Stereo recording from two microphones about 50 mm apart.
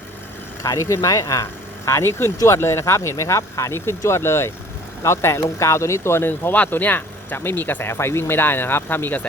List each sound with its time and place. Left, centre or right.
0.8 s speech: left
1.8 s speech: left
3.8 s speech: left
6.7 s speech: left
7.9 s speech: left